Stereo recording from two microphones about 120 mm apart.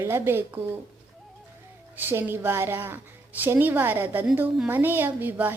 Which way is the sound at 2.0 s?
15° right (ahead or behind).